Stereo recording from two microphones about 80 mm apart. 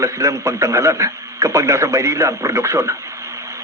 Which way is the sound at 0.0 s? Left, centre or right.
Right.